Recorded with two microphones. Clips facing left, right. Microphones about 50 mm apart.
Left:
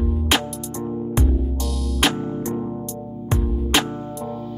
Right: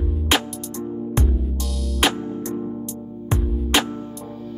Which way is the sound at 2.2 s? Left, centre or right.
Left.